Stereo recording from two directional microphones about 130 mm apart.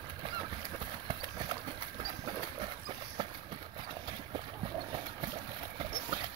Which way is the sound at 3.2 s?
35° right (ahead or behind).